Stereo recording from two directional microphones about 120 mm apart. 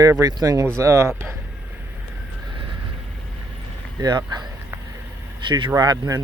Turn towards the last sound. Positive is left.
turn(degrees=-30)  # may be behind; listen again after turning